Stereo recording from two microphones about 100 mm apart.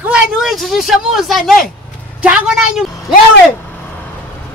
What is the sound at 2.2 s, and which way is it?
Speech, 10° right (ahead or behind).